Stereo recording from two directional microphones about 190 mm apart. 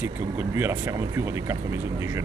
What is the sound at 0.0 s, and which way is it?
Speech, 10° right (ahead or behind).